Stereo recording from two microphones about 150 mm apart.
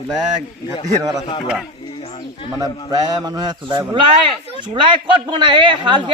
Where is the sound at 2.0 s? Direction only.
35° left (ahead or behind).